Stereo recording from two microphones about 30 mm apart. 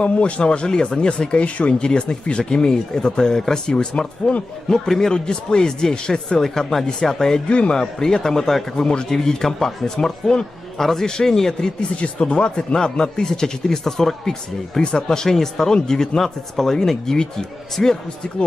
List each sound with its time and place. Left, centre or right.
0.0 s speech: left
0.4 s speech: left
1.4 s speech: left
1.8 s speech: left
5.1 s speech: left
7.1 s speech: centre
7.4 s speech: left
7.8 s speech: centre
8.8 s speech: left
12.0 s speech: left; by 14.8 s centre
14.8 s speech: left